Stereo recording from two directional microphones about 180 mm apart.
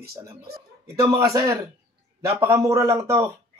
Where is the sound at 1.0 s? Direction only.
20° right (ahead or behind).